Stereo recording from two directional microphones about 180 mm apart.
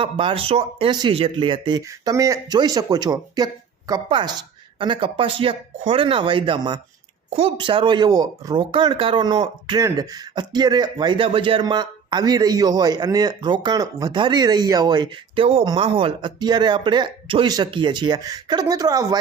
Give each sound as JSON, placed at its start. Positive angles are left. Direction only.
{"t": 0.0, "sound": "speech", "side_deg": -30}